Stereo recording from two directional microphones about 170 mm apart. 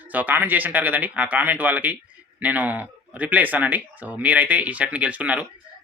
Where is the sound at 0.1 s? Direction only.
10° right (ahead or behind).